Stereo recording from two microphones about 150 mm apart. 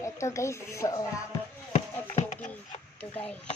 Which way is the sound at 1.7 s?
45° left (ahead or behind).